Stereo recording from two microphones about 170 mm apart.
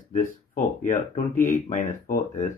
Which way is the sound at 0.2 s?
50° left (ahead or behind).